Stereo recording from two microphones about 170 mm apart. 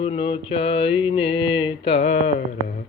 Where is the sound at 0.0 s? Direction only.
30° left (ahead or behind).